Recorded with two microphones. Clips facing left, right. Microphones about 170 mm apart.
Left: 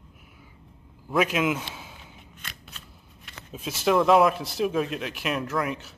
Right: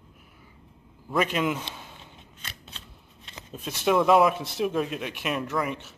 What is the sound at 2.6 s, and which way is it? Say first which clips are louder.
Shuffling cards: even; 25° right (ahead or behind).